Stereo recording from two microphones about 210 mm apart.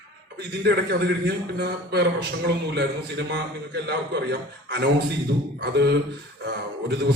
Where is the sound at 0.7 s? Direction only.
55° right (ahead or behind).